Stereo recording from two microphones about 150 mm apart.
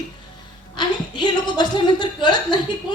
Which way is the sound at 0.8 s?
30° left (ahead or behind).